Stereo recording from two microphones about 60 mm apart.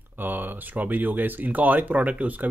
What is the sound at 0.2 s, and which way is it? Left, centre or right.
Speech, right.